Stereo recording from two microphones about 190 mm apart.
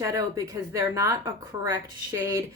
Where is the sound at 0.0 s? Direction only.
15° right (ahead or behind).